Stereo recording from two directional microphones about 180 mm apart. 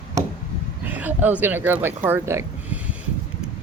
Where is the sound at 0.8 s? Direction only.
10° right (ahead or behind).